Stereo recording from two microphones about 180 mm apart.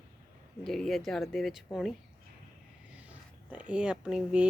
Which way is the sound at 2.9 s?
10° right (ahead or behind).